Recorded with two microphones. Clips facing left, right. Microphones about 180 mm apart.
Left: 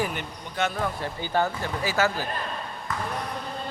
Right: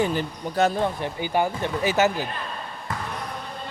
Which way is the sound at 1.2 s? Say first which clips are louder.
Right 2 dB; 15° right (ahead or behind).